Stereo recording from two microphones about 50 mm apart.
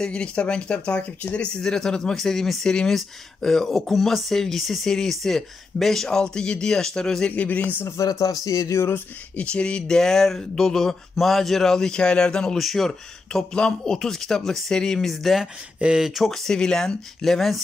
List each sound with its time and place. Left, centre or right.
0.0 s speech: centre
7.2 s speech: left
8.0 s speech: left
8.6 s a sound: left
9.4 s speech: left
9.8 s speech: centre
12.5 s speech: centre
15.8 s speech: centre
16.2 s speech: centre